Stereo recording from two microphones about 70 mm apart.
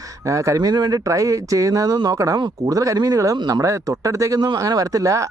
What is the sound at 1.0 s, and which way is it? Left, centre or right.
Speech, right.